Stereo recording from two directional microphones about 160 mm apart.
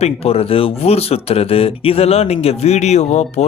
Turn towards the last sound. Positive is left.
turn(degrees=45)  # may be behind; listen again after turning